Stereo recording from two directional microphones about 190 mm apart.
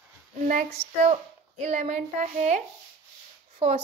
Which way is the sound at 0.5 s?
35° right (ahead or behind).